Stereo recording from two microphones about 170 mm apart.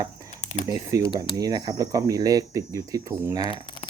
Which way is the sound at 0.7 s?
20° right (ahead or behind).